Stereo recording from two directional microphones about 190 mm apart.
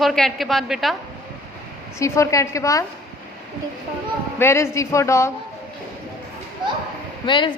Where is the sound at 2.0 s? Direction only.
15° left (ahead or behind).